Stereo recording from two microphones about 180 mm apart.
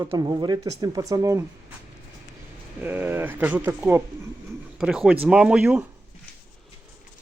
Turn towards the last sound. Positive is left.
turn(degrees=-5)  # may be behind; listen again after turning